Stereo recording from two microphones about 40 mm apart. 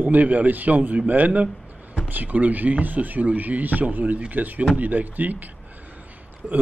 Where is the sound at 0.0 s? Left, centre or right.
Right.